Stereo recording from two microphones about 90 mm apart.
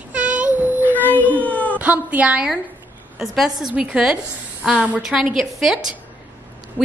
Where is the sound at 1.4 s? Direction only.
15° left (ahead or behind).